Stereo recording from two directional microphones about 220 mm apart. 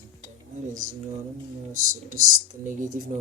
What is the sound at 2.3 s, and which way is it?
Speech, 35° right (ahead or behind).